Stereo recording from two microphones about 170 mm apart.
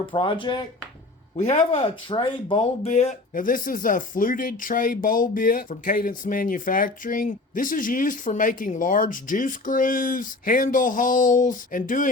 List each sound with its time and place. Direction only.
0.1 s speech: 30° left (ahead or behind)
1.4 s speech: 40° left (ahead or behind)